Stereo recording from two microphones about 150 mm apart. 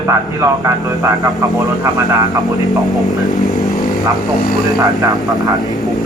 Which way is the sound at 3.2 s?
25° left (ahead or behind).